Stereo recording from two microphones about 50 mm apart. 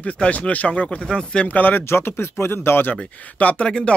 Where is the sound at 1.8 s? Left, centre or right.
Left.